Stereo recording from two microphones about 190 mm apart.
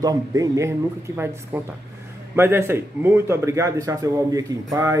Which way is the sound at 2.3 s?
10° right (ahead or behind).